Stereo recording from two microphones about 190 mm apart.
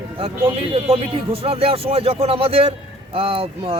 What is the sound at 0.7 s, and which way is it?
A man's voice, 30° right (ahead or behind).